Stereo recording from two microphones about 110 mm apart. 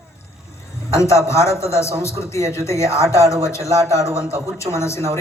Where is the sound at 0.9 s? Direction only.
30° left (ahead or behind).